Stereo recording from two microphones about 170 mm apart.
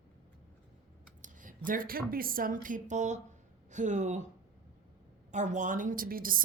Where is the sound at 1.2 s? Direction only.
50° right (ahead or behind).